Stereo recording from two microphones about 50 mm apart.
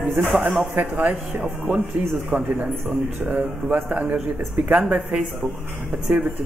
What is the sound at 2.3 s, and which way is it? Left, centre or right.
Speech, right.